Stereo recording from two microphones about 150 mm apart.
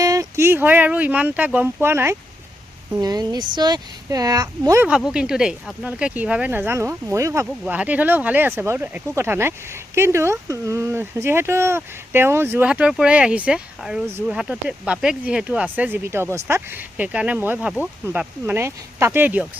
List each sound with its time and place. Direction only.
0.0 s speech: 20° right (ahead or behind)
3.0 s speech: 25° right (ahead or behind)
4.9 s speech: 5° right (ahead or behind)
7.4 s speech: 5° right (ahead or behind)